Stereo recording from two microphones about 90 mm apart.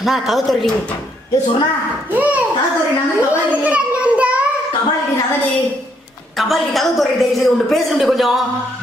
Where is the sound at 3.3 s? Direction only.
15° right (ahead or behind).